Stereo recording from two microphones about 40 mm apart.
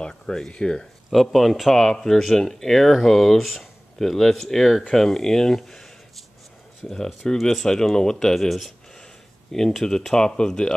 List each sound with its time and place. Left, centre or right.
0.1 s speech: centre
1.1 s speech: centre
7.6 s speech: centre